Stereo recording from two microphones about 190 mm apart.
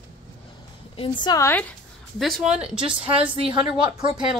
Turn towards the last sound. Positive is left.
turn(degrees=-25)  # may be behind; listen again after turning